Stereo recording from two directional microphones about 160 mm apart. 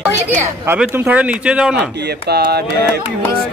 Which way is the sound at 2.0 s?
90° right.